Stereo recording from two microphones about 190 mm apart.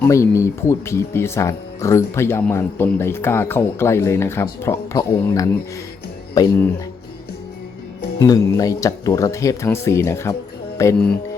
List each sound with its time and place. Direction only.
0.0 s speech: 15° left (ahead or behind)
8.2 s speech: 15° left (ahead or behind)